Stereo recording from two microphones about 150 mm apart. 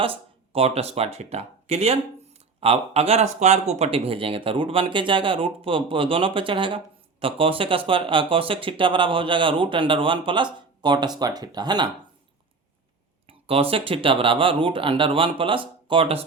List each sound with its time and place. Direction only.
0.0 s speech: 40° right (ahead or behind)
13.2 s speech: 40° right (ahead or behind)